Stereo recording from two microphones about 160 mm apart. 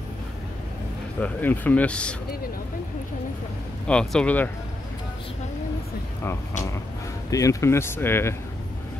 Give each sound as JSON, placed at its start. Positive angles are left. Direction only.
{"t": 1.2, "sound": "speech", "side_deg": 10}
{"t": 3.8, "sound": "speech", "side_deg": 5}
{"t": 7.2, "sound": "speech", "side_deg": 20}